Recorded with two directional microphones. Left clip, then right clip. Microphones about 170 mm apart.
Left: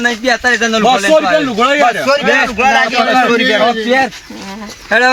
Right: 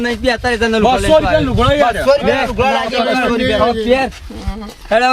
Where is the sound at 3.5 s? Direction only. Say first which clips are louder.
Left 2 dB; 15° right (ahead or behind).